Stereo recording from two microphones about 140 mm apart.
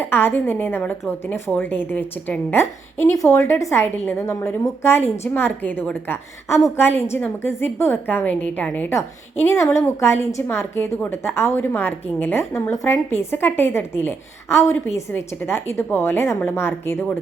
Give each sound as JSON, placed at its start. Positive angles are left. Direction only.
{"t": 0.0, "sound": "a woman's voice", "side_deg": 15}